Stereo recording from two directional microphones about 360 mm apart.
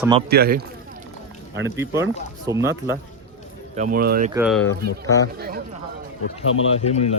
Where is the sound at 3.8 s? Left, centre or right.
Right.